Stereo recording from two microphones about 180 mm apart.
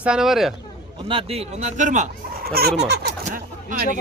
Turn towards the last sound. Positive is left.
turn(degrees=-50)  # may be behind; listen again after turning